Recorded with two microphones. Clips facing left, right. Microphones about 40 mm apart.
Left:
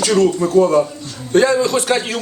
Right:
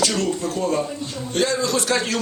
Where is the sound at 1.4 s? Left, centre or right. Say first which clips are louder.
Left 7 dB; left.